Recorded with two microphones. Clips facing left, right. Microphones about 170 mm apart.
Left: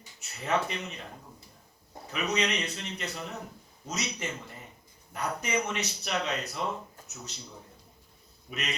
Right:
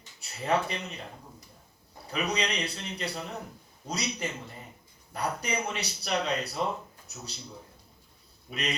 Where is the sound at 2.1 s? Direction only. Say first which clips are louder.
Left 1 dB; 35° right (ahead or behind).